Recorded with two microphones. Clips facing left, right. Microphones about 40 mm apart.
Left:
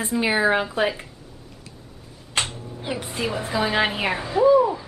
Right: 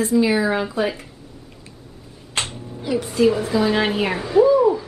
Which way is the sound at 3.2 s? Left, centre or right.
Centre.